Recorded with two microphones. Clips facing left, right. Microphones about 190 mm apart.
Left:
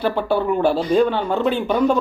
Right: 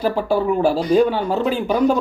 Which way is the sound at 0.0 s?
5° right (ahead or behind).